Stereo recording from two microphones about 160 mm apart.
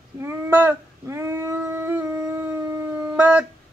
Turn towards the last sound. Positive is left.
turn(degrees=-20)  # may be behind; listen again after turning